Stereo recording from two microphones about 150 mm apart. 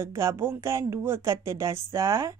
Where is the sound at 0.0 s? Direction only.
20° right (ahead or behind).